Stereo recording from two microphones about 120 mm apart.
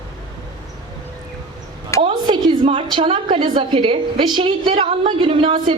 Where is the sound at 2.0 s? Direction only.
45° right (ahead or behind).